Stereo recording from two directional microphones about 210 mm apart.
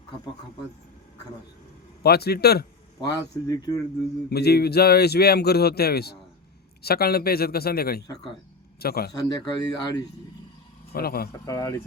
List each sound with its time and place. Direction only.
2.0 s speech: 50° left (ahead or behind)
3.0 s speech: 20° left (ahead or behind)
4.3 s speech: 50° left (ahead or behind)
9.1 s speech: 20° left (ahead or behind)
10.9 s speech: 45° left (ahead or behind)
11.3 s speech: 15° left (ahead or behind)